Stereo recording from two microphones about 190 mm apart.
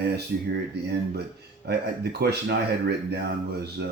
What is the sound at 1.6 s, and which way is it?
Speech, 60° right (ahead or behind).